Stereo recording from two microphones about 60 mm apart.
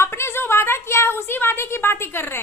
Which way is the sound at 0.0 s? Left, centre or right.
Left.